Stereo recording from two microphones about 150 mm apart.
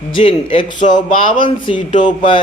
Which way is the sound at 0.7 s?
55° left (ahead or behind).